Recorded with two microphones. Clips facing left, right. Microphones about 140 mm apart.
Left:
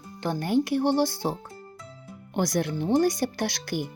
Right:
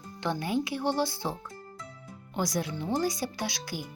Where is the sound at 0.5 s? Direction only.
65° left (ahead or behind).